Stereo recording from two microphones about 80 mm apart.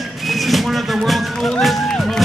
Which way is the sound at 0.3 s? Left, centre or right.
Centre.